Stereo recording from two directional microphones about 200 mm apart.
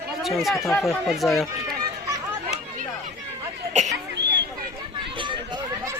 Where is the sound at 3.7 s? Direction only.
35° right (ahead or behind).